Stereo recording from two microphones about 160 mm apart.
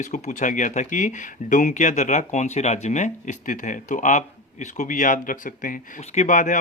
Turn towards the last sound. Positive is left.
turn(degrees=50)  # may be behind; listen again after turning